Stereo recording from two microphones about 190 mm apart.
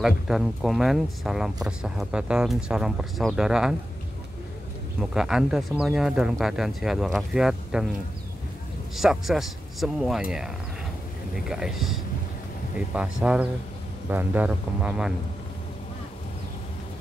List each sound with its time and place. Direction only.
0.0 s speech: centre (ahead or behind)
5.1 s speech: centre (ahead or behind)
8.9 s speech: centre (ahead or behind)
11.3 s speech: 5° right (ahead or behind)